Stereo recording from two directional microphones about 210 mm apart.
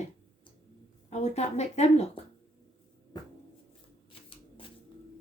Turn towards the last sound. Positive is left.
turn(degrees=25)  # may be behind; listen again after turning